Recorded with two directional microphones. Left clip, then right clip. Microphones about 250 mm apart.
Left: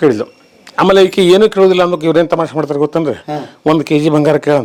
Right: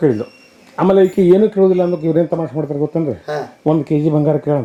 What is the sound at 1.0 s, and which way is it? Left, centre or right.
Speech, left.